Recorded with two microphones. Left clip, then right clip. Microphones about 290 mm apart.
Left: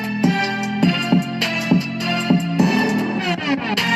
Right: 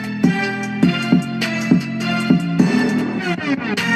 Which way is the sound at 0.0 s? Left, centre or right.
Centre.